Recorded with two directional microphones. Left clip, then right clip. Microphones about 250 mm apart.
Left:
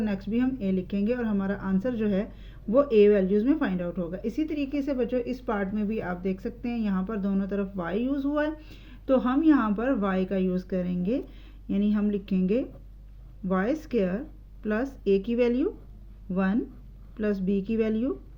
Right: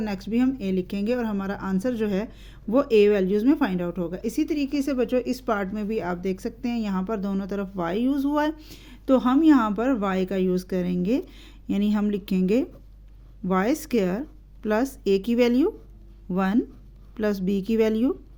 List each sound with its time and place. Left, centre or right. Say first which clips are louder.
0.0 s speech: right 3 dB; right